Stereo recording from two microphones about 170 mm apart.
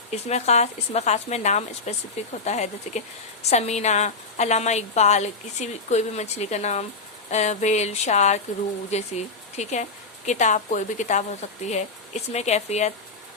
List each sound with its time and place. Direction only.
0.1 s a woman's voice: 40° left (ahead or behind)